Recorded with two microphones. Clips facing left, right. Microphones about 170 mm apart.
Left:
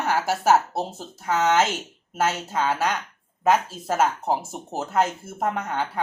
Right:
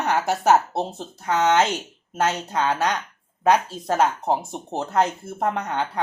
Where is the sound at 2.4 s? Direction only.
5° left (ahead or behind).